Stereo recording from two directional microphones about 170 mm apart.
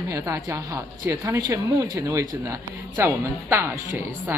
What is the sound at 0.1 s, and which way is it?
A woman's voice, 20° right (ahead or behind).